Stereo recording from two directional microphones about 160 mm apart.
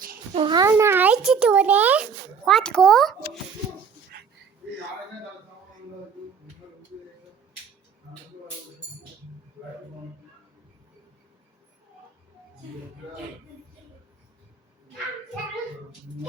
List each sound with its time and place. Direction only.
0.3 s a child's voice: 30° right (ahead or behind)
0.6 s a child's voice: 15° right (ahead or behind)
2.4 s a child's voice: 5° left (ahead or behind)
4.1 s a sound: 80° right